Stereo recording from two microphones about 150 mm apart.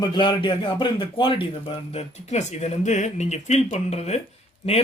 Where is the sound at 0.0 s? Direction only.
30° left (ahead or behind).